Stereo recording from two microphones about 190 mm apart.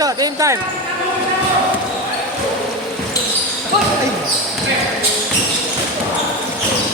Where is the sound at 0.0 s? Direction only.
20° right (ahead or behind).